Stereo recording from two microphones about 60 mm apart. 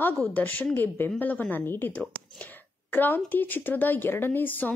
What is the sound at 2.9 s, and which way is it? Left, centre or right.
Speech, left.